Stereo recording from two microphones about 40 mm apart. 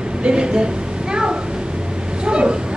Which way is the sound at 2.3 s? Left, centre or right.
Right.